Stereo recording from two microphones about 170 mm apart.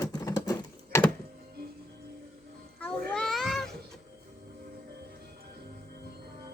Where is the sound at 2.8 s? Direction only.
5° left (ahead or behind).